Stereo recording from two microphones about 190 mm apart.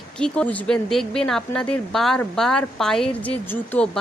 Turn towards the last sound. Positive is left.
turn(degrees=5)  # may be behind; listen again after turning